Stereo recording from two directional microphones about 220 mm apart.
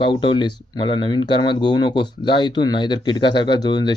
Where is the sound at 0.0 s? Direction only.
20° left (ahead or behind).